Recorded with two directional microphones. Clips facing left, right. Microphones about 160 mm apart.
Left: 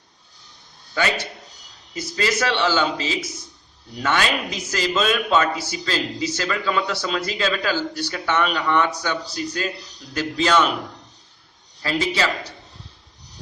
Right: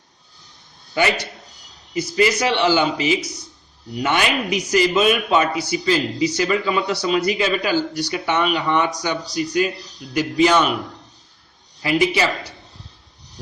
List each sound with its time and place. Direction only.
0.9 s a man's voice: 15° right (ahead or behind)
11.8 s a man's voice: 15° right (ahead or behind)